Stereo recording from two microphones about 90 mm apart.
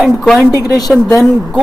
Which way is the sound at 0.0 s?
Centre (ahead or behind).